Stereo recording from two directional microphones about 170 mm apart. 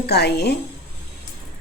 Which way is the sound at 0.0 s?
75° left (ahead or behind).